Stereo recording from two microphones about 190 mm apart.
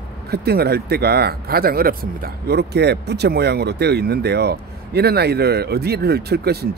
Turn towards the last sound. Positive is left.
turn(degrees=-55)  # may be behind; listen again after turning